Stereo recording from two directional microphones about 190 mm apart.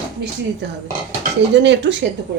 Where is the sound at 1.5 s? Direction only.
65° right (ahead or behind).